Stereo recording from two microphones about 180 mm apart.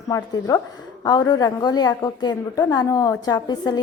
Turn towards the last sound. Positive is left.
turn(degrees=20)  # may be behind; listen again after turning